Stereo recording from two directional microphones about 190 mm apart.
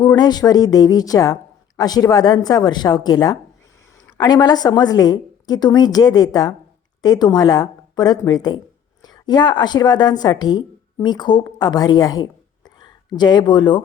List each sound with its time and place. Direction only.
0.2 s a woman's voice: 20° left (ahead or behind)